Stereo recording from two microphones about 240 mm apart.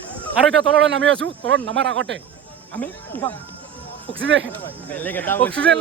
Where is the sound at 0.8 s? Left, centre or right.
Right.